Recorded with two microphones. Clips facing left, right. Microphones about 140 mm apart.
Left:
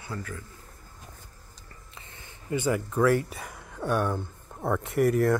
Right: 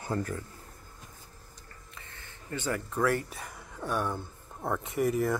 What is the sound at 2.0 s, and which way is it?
Speech, 20° left (ahead or behind).